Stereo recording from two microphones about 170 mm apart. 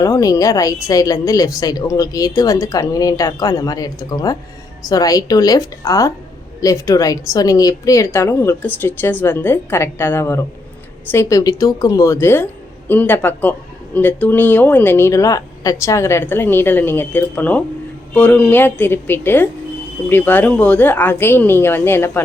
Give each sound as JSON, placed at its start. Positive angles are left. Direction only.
{"t": 0.0, "sound": "a woman's voice", "side_deg": 20}